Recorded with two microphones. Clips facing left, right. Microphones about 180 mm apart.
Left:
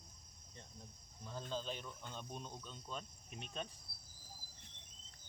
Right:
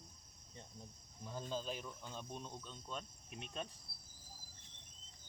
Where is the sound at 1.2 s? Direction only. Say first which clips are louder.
Right 1 dB; 10° right (ahead or behind).